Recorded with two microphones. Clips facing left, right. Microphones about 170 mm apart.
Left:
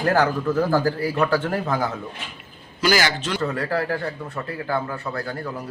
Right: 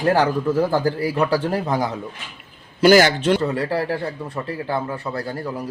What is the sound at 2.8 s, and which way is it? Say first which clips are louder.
Speech: right 8 dB; 55° right (ahead or behind).